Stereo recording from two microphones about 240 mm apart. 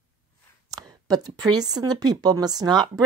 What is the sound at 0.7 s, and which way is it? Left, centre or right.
A woman's voice, centre.